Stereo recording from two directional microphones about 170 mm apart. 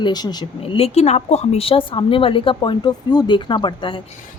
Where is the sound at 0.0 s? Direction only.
25° left (ahead or behind).